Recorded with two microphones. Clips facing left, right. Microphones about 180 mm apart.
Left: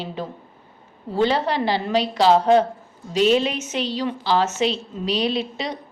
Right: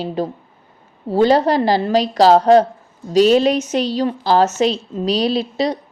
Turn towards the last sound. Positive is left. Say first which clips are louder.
# right 6 dB
turn(degrees=-35)  # may be behind; listen again after turning